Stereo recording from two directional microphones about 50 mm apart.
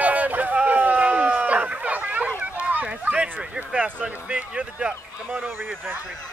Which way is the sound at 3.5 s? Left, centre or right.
Right.